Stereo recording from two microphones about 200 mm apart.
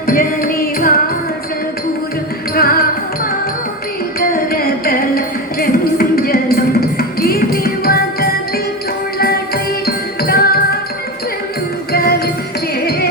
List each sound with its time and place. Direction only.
0.1 s music: 45° left (ahead or behind)
2.6 s music: 50° left (ahead or behind)
4.2 s music: 45° left (ahead or behind)
9.8 s music: 50° left (ahead or behind)
11.9 s music: 50° left (ahead or behind)